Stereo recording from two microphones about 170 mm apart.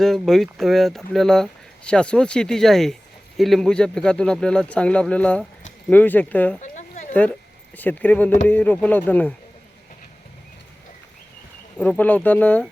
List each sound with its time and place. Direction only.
0.0 s speech: centre (ahead or behind)
6.6 s a sound: 45° left (ahead or behind)
7.1 s speech: 10° left (ahead or behind)
11.8 s speech: 10° left (ahead or behind)